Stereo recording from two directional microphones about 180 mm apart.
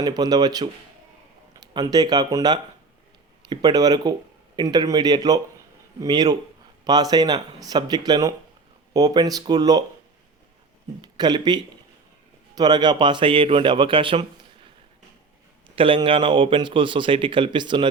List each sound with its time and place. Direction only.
0.0 s speech: 20° right (ahead or behind)
11.0 s speech: 25° right (ahead or behind)
15.7 s speech: 30° right (ahead or behind)